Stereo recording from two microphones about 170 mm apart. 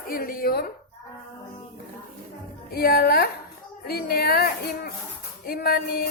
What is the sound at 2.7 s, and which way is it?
A woman's voice, 65° left (ahead or behind).